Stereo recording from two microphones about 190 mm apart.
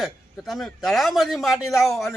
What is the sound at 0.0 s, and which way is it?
A man's voice, centre (ahead or behind).